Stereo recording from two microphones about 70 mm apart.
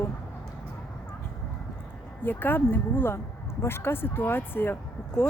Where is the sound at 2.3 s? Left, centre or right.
Left.